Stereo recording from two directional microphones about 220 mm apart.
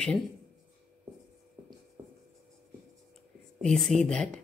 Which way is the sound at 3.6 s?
5° left (ahead or behind).